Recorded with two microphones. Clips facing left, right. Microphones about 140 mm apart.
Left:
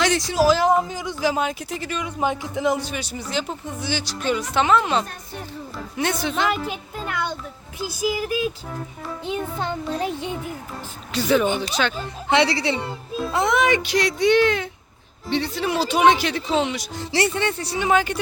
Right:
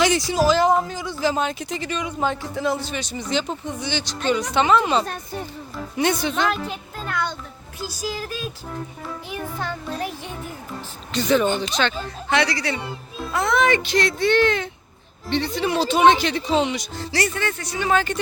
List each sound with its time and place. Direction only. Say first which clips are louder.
0.0 s a man's voice: even; centre (ahead or behind)
6.7 s music: left 1 dB; 15° left (ahead or behind)
8.0 s a man's voice: left 7 dB; 15° left (ahead or behind)
9.2 s music: left 4 dB; 20° left (ahead or behind)
11.1 s a man's voice: even; 5° left (ahead or behind)
12.3 s music: left 3 dB; 25° left (ahead or behind)
13.3 s a man's voice: even; 20° left (ahead or behind); by 16.8 s centre (ahead or behind)
17.0 s music: left 3 dB; 25° left (ahead or behind)
17.8 s a man's voice: left 1 dB; 10° left (ahead or behind)